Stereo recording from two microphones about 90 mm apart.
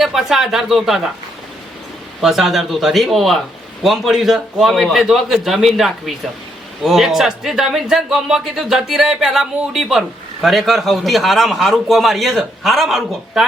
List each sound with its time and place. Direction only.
0.0 s speech: 5° right (ahead or behind)
2.2 s speech: centre (ahead or behind)